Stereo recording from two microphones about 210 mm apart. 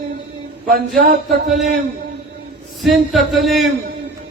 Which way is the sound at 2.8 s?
Centre (ahead or behind).